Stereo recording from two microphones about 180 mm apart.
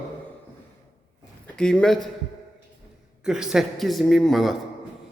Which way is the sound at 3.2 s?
5° right (ahead or behind).